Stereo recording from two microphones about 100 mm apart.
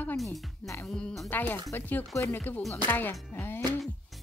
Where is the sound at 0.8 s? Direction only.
5° left (ahead or behind).